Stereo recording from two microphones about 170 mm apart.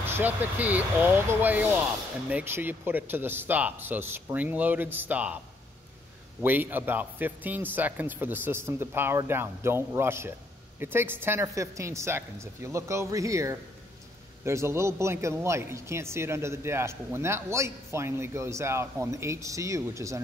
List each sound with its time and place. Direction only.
0.0 s a man's voice: 10° right (ahead or behind)
6.4 s a man's voice: 10° right (ahead or behind)